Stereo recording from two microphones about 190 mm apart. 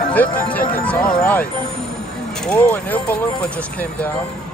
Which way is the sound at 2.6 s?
10° left (ahead or behind).